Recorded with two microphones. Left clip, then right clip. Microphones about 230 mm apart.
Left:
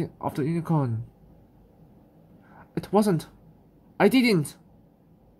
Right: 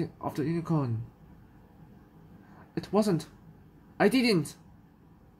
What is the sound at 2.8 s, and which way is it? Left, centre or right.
Speech, left.